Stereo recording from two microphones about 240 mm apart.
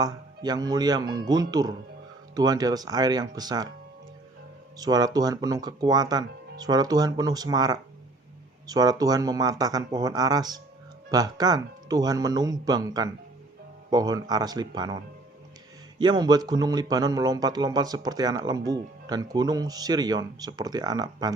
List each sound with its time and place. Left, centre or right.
0.0 s speech: centre
4.8 s speech: centre